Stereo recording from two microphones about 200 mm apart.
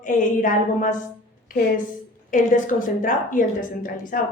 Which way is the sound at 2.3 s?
40° left (ahead or behind).